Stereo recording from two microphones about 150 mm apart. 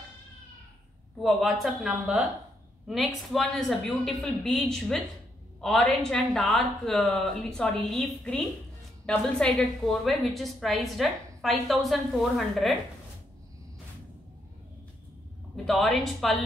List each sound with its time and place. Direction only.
1.2 s a woman's voice: centre (ahead or behind)
3.3 s a woman's voice: 5° left (ahead or behind)
15.5 s a woman's voice: centre (ahead or behind)